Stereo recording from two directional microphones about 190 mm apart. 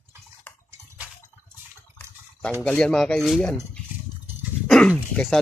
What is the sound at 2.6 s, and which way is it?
Speech, 5° left (ahead or behind).